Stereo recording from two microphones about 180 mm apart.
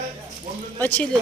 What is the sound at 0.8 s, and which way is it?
Speech, 5° left (ahead or behind).